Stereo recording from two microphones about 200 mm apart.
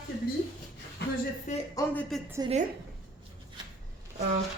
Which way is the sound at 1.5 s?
35° left (ahead or behind).